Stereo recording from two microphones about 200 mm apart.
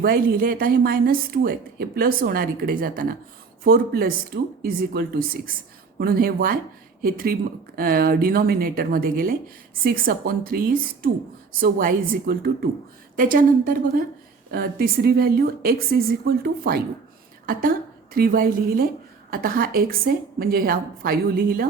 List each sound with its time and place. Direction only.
0.0 s a woman's voice: 45° right (ahead or behind)